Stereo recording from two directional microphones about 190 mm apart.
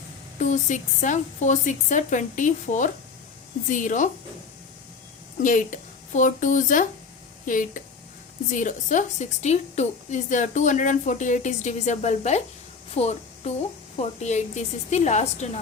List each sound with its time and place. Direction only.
0.3 s a woman's voice: 40° left (ahead or behind)
5.4 s a woman's voice: 45° left (ahead or behind)
12.9 s a sound: 35° left (ahead or behind)
14.0 s a woman's voice: 35° left (ahead or behind)